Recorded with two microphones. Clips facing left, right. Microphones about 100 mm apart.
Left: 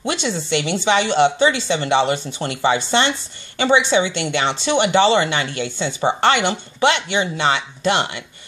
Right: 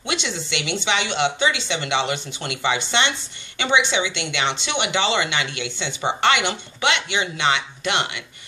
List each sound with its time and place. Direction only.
0.0 s speech: 40° left (ahead or behind)